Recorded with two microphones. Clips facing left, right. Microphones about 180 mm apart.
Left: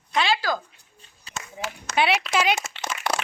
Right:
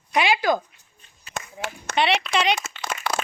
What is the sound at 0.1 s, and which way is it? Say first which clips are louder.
Speech: right 3 dB; 20° right (ahead or behind).